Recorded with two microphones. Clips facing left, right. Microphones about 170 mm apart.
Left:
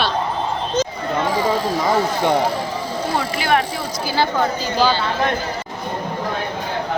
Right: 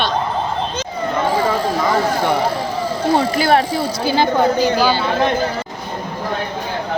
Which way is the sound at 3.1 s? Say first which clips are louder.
Right 4 dB; 35° right (ahead or behind).